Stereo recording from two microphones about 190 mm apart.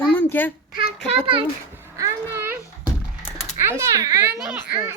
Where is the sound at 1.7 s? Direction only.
15° right (ahead or behind).